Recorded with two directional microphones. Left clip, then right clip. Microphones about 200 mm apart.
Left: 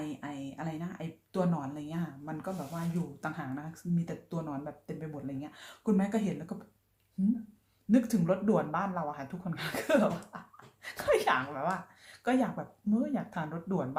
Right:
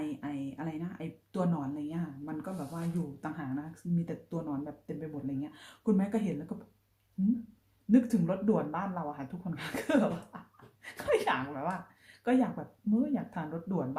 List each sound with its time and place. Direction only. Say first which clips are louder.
0.0 s a sound: right 2 dB; 5° left (ahead or behind)
3.2 s speech: left 1 dB; 10° left (ahead or behind)
7.9 s speech: even; 10° left (ahead or behind)